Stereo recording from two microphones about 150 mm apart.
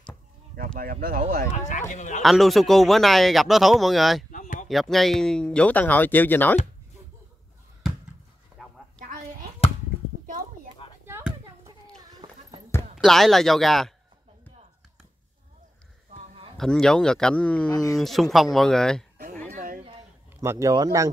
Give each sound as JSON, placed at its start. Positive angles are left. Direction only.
{"t": 0.7, "sound": "speech", "side_deg": -75}
{"t": 1.7, "sound": "speech", "side_deg": 55}
{"t": 2.2, "sound": "speech", "side_deg": 0}
{"t": 4.3, "sound": "a sound", "side_deg": 60}
{"t": 4.6, "sound": "speech", "side_deg": 0}
{"t": 8.5, "sound": "a sound", "side_deg": -5}
{"t": 11.1, "sound": "a sound", "side_deg": -15}
{"t": 12.2, "sound": "basketball bounce", "side_deg": -25}
{"t": 12.9, "sound": "speech", "side_deg": 0}
{"t": 16.5, "sound": "speech", "side_deg": 5}
{"t": 17.6, "sound": "speech", "side_deg": 25}
{"t": 17.9, "sound": "speech", "side_deg": 0}
{"t": 19.5, "sound": "a sound", "side_deg": -65}
{"t": 20.3, "sound": "speech", "side_deg": -20}